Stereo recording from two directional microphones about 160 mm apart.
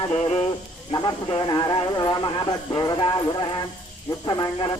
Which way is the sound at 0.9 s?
30° left (ahead or behind).